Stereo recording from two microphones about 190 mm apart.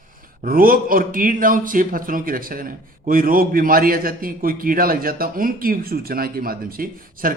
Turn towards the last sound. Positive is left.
turn(degrees=-50)  # may be behind; listen again after turning